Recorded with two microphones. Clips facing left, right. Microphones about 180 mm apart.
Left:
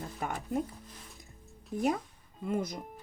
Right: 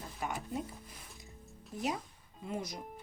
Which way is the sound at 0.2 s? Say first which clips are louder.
Left 4 dB; 55° left (ahead or behind).